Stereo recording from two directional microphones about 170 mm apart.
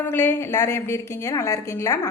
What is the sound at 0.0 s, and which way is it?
A woman's voice, 10° left (ahead or behind).